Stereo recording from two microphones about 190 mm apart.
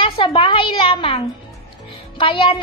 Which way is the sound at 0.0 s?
30° left (ahead or behind).